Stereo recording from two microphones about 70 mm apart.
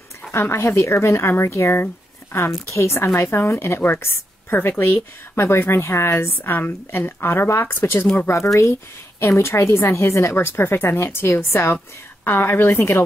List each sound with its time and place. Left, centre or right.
0.3 s a woman's voice: left
9.2 s a woman's voice: left